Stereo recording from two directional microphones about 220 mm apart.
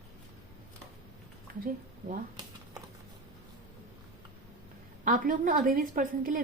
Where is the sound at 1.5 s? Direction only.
40° right (ahead or behind).